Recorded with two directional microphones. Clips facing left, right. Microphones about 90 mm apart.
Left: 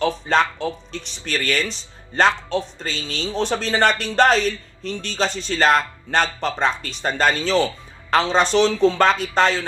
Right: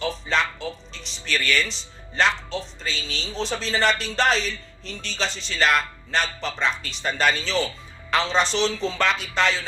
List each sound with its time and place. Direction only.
0.0 s speech: 50° left (ahead or behind)